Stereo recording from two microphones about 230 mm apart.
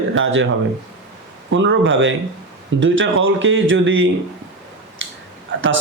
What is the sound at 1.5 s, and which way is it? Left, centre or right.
A man's voice, right.